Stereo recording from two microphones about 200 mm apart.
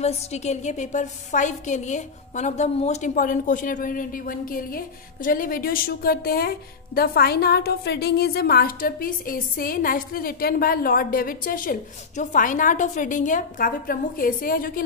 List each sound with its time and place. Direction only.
0.0 s a woman's voice: 35° left (ahead or behind)